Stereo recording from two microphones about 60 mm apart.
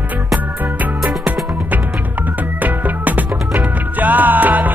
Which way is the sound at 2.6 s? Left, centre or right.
Right.